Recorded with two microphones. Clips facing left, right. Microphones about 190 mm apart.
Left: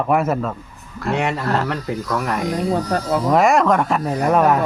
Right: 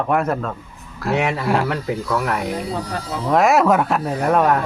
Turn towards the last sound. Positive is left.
turn(degrees=0)  # may be behind; listen again after turning